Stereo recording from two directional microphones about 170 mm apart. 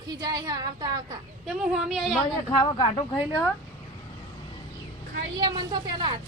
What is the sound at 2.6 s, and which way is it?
Speech, 30° left (ahead or behind).